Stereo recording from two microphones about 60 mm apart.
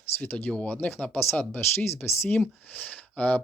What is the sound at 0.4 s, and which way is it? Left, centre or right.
Speech, left.